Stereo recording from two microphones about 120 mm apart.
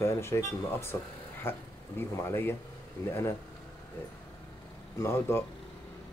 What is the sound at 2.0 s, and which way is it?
Speech, 20° left (ahead or behind).